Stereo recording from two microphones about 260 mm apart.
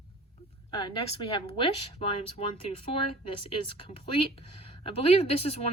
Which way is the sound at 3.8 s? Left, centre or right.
Left.